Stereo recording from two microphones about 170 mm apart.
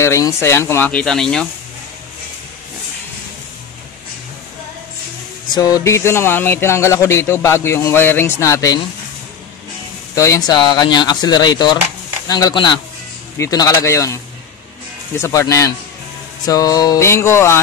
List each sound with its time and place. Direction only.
0.0 s speech: 15° left (ahead or behind)
5.5 s speech: 20° left (ahead or behind)
10.1 s speech: 20° left (ahead or behind)